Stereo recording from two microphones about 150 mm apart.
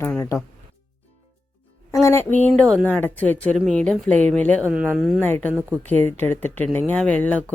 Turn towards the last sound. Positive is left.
turn(degrees=10)  # may be behind; listen again after turning